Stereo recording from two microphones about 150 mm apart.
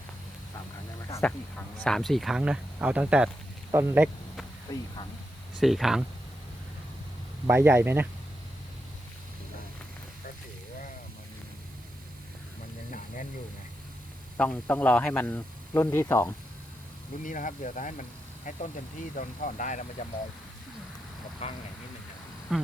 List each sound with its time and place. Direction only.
1.2 s speech: 10° left (ahead or behind); by 4.1 s 15° right (ahead or behind)
4.7 s speech: 25° left (ahead or behind)
5.5 s speech: centre (ahead or behind)
7.4 s a man's voice: 15° right (ahead or behind)
14.3 s speech: 10° left (ahead or behind)
17.2 s speech: 60° left (ahead or behind)
21.4 s speech: 40° left (ahead or behind)
22.5 s speech: centre (ahead or behind)